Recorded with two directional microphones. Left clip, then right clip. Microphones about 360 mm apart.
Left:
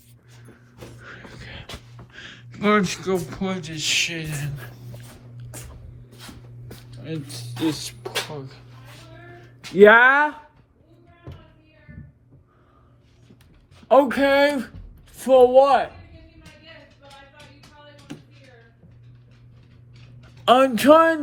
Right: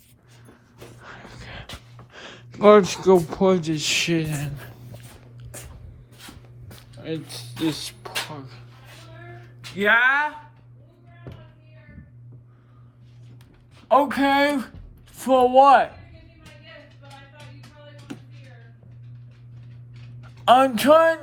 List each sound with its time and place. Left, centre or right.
1.0 s a sound: centre
2.1 s speech: centre
7.0 s speech: centre
13.8 s speech: centre
15.1 s a sound: centre
15.5 s a man's voice: centre
20.4 s speech: centre